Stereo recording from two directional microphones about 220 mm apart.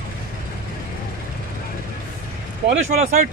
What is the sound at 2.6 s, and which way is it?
Speech, 30° right (ahead or behind).